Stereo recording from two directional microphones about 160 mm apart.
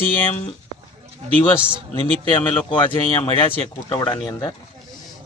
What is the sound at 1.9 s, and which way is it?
Speech, 30° left (ahead or behind).